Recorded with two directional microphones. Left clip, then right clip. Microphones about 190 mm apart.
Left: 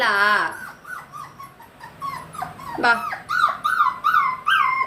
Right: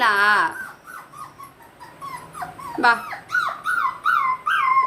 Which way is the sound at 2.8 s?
10° right (ahead or behind).